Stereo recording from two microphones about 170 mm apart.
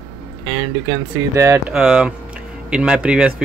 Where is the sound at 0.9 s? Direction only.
15° right (ahead or behind).